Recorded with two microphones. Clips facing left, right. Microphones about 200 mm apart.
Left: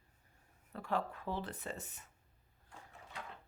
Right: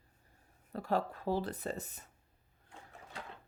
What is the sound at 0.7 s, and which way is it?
Speech, 35° right (ahead or behind).